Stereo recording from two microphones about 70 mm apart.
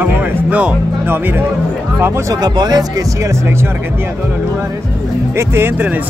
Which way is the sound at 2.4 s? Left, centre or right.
Right.